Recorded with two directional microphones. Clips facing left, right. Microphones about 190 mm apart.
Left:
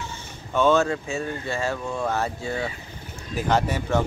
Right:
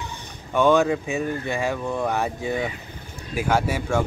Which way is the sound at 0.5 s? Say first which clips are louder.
Right 2 dB; 15° right (ahead or behind).